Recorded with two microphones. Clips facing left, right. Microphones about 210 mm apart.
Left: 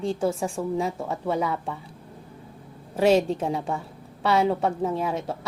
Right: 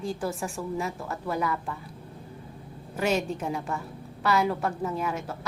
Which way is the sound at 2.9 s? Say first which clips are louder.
Left 7 dB; 30° left (ahead or behind).